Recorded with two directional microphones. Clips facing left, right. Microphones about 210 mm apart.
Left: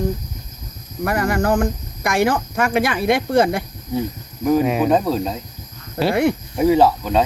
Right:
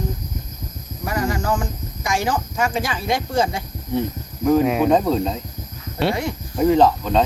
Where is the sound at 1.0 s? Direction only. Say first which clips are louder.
Left 4 dB; 60° left (ahead or behind).